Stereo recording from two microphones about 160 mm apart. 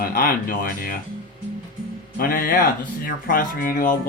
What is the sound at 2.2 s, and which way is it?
Speech, 65° left (ahead or behind).